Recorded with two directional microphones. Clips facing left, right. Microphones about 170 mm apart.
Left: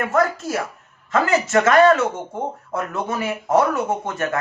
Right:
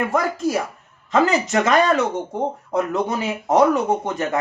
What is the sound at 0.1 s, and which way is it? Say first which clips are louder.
A man's voice: even; 15° right (ahead or behind).